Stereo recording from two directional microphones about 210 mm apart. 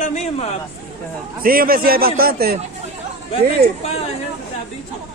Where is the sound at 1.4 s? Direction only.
45° right (ahead or behind).